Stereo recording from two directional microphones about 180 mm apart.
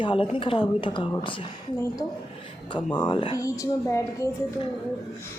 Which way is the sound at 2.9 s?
25° left (ahead or behind).